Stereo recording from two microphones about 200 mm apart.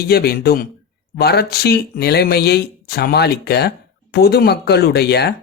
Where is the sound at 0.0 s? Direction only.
50° left (ahead or behind).